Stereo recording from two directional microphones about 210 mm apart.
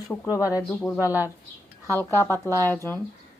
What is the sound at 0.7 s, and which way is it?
A woman's voice, 5° left (ahead or behind).